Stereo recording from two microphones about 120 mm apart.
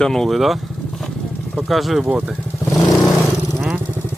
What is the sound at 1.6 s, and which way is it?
Speech, centre (ahead or behind).